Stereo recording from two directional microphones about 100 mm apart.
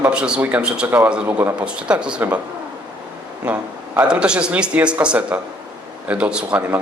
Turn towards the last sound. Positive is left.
turn(degrees=-15)  # may be behind; listen again after turning